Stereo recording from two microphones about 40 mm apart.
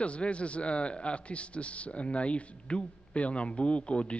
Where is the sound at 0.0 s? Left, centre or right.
Left.